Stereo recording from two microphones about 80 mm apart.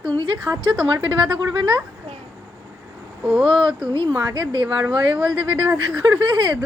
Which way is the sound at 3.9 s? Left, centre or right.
Right.